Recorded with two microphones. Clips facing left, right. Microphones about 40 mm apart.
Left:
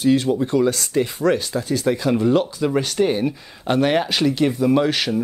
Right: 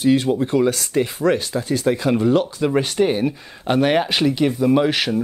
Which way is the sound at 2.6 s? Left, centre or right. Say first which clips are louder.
Right 1 dB; centre.